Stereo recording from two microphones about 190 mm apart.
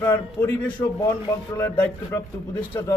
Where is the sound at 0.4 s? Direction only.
10° left (ahead or behind).